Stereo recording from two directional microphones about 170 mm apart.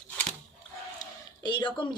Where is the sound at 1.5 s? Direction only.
25° left (ahead or behind).